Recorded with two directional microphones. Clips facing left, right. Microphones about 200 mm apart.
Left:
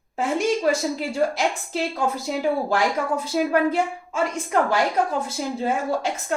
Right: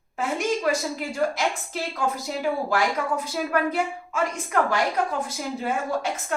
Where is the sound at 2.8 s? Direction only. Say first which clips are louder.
Left 2 dB; 25° left (ahead or behind).